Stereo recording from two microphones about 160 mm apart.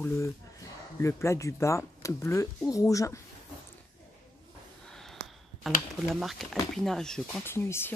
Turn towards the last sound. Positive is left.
turn(degrees=15)  # may be behind; listen again after turning